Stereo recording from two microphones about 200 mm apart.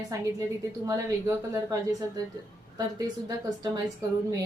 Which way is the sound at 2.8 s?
20° right (ahead or behind).